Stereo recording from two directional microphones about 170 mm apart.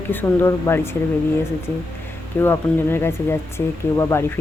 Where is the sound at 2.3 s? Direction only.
15° left (ahead or behind).